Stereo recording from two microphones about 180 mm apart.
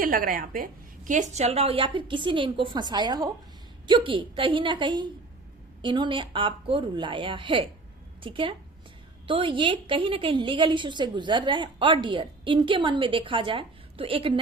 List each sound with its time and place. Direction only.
0.0 s a woman's voice: 50° right (ahead or behind); by 14.3 s 30° right (ahead or behind)